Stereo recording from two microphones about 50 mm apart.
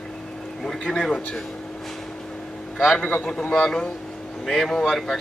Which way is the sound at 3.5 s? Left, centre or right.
Centre.